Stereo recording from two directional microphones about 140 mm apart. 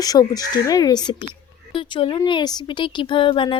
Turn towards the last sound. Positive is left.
turn(degrees=35)  # may be behind; listen again after turning